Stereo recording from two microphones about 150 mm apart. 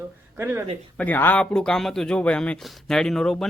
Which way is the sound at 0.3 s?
15° right (ahead or behind).